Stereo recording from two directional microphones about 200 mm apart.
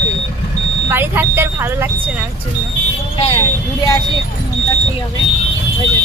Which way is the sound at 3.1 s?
30° left (ahead or behind).